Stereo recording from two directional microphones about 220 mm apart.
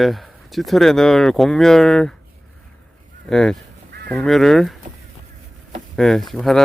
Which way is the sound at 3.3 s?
Centre (ahead or behind).